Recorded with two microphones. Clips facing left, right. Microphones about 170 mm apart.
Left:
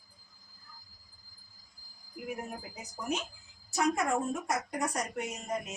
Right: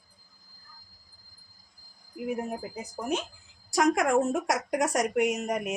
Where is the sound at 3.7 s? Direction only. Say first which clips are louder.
Right 6 dB; 90° right.